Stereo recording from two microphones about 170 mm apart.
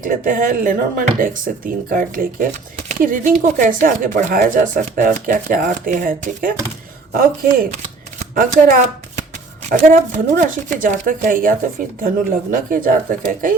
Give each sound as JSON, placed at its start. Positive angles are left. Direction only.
{"t": 0.0, "sound": "speech", "side_deg": -50}